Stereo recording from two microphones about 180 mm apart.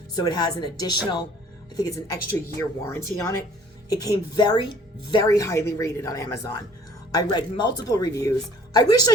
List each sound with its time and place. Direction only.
0.2 s a woman's voice: 20° left (ahead or behind)